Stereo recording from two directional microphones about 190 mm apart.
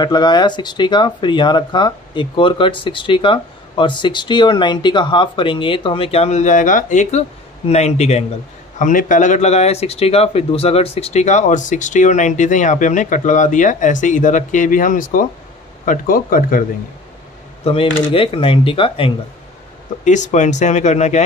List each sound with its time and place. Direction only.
0.0 s speech: 20° left (ahead or behind); by 16.6 s 50° left (ahead or behind)
17.6 s speech: 30° left (ahead or behind)
20.1 s speech: 40° left (ahead or behind)